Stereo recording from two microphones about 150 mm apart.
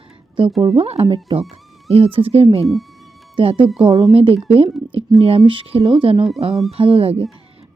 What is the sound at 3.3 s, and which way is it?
Speech, 35° right (ahead or behind).